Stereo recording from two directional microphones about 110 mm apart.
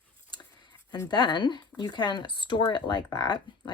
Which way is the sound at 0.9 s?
40° left (ahead or behind).